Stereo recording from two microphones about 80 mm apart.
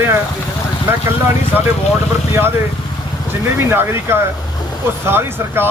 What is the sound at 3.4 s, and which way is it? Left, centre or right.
Speech, right.